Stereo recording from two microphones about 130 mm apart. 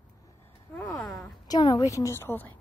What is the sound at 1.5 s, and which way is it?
A woman's voice, 30° left (ahead or behind).